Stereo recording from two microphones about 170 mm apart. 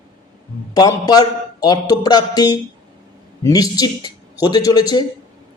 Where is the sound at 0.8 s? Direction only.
20° left (ahead or behind).